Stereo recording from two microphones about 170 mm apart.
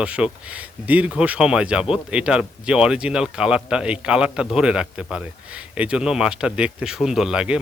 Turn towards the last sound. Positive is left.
turn(degrees=-5)  # may be behind; listen again after turning